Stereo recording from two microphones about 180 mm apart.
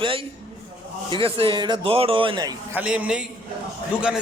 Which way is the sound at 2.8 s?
5° right (ahead or behind).